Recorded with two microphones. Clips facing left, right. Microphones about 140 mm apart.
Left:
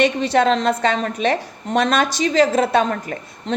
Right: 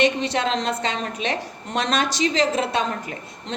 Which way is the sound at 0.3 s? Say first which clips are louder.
Left 7 dB; 50° left (ahead or behind).